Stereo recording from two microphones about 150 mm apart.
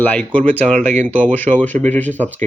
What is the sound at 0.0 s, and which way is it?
Speech, 10° left (ahead or behind).